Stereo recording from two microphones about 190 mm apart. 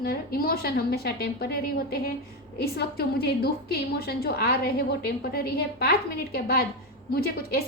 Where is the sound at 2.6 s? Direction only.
55° left (ahead or behind).